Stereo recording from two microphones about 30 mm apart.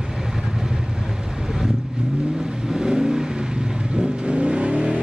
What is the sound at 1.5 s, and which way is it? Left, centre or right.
Vehicle, centre.